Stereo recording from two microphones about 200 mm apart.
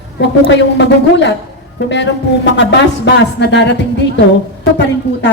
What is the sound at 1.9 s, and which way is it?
A woman's voice, 60° left (ahead or behind).